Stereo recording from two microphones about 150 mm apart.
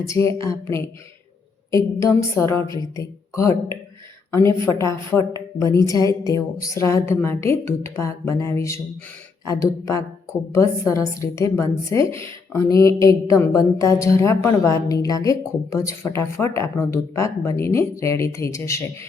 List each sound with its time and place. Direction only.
0.1 s speech: 20° left (ahead or behind)
4.6 s speech: 20° left (ahead or behind)